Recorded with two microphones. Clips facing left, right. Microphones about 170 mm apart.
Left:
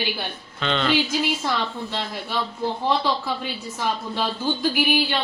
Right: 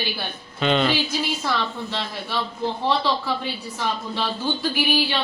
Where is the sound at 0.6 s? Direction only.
10° right (ahead or behind).